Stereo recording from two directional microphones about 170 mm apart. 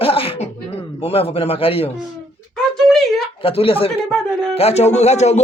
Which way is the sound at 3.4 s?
35° left (ahead or behind).